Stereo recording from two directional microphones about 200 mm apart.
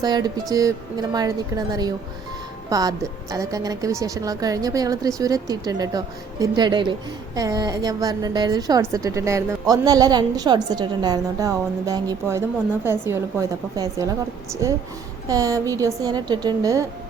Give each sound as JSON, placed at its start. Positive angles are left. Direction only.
{"t": 0.0, "sound": "a woman's voice", "side_deg": -20}